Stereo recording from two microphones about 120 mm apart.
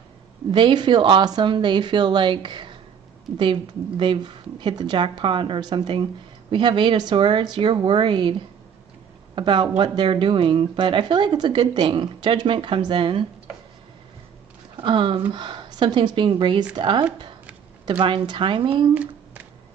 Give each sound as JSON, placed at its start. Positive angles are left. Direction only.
{"t": 0.5, "sound": "speech", "side_deg": -40}
{"t": 14.8, "sound": "speech", "side_deg": -45}